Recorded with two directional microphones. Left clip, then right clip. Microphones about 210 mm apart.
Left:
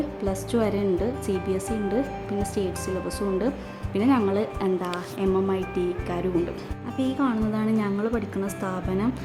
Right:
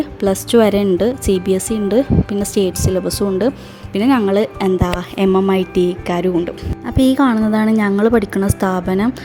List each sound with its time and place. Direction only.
0.2 s speech: 35° right (ahead or behind)